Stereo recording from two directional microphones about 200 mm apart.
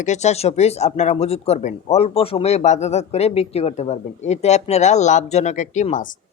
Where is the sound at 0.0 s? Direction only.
35° left (ahead or behind).